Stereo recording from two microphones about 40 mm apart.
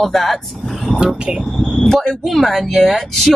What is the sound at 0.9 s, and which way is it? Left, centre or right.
Speech, right.